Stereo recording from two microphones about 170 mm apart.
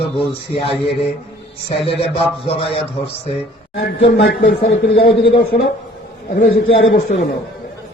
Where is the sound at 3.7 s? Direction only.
80° left; by 7.3 s 65° left (ahead or behind).